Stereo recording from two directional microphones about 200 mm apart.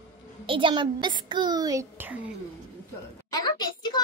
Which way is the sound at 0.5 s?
25° right (ahead or behind).